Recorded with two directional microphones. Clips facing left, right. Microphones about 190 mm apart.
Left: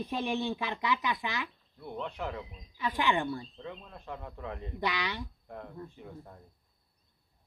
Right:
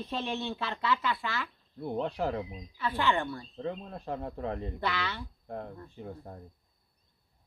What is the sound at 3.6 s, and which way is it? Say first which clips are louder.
Speech: right 7 dB; 40° right (ahead or behind).